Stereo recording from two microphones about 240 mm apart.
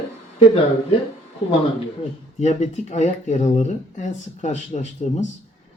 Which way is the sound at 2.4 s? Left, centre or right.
Left.